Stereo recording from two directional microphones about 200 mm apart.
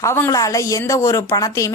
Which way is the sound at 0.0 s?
15° left (ahead or behind).